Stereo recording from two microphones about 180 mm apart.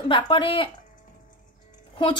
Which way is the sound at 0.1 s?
30° left (ahead or behind).